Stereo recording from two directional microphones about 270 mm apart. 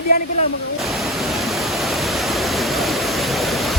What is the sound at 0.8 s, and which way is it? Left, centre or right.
Pink noise, centre.